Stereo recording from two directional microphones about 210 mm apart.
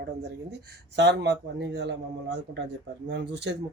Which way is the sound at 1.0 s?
55° right (ahead or behind).